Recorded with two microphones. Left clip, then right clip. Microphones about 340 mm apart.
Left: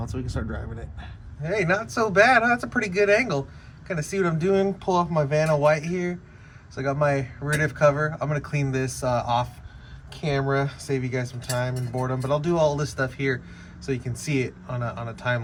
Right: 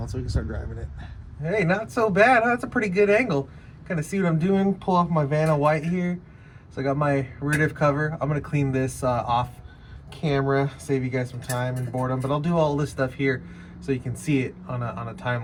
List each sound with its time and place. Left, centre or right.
1.5 s speech: left